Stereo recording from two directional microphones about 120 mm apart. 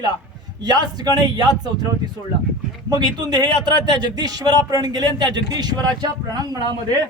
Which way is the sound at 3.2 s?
35° right (ahead or behind).